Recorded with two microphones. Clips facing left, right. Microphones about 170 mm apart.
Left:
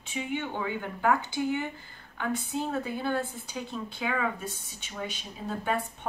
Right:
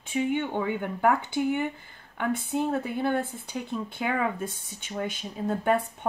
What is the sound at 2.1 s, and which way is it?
A woman's voice, 60° right (ahead or behind).